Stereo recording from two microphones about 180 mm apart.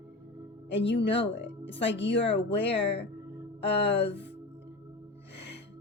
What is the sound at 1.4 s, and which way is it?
Speech, 85° left.